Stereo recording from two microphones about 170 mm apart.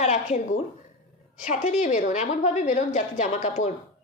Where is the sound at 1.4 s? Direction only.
45° left (ahead or behind).